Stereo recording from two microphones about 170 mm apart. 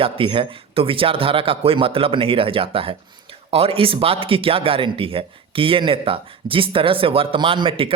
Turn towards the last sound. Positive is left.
turn(degrees=-30)  # may be behind; listen again after turning